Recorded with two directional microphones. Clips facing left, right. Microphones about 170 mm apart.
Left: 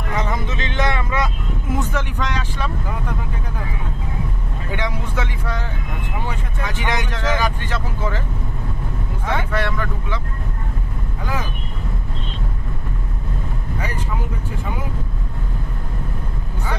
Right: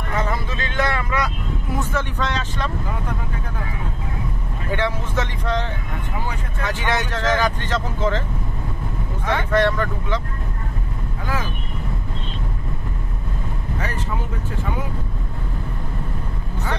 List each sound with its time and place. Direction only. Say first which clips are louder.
0.1 s vehicle: even; 20° left (ahead or behind)
4.7 s speech: right 2 dB; 10° left (ahead or behind)
9.2 s speech: right 4 dB; 10° left (ahead or behind)